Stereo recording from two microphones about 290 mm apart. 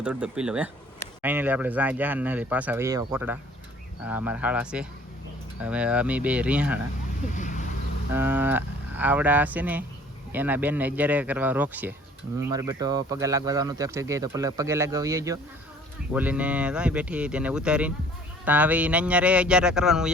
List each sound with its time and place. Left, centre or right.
0.0 s speech: centre
7.3 s vehicle: left
8.1 s speech: centre